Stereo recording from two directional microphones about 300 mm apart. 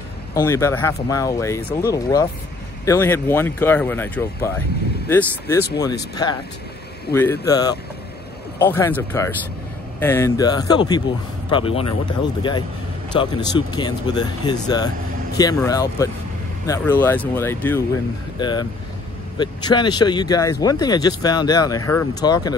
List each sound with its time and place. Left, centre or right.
0.3 s speech: centre
7.2 s speech: centre